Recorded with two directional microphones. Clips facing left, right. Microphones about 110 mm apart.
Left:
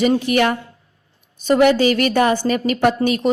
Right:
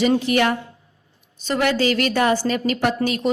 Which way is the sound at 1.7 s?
20° left (ahead or behind).